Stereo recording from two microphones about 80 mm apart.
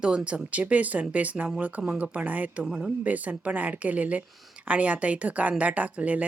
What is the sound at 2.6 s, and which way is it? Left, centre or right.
Speech, centre.